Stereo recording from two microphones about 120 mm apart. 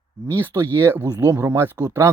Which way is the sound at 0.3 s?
20° right (ahead or behind).